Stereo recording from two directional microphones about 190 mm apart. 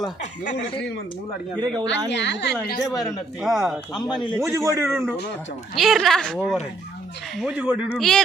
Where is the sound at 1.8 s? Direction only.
65° left (ahead or behind).